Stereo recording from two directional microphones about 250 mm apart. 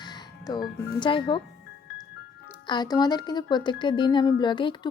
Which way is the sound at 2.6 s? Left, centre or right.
Centre.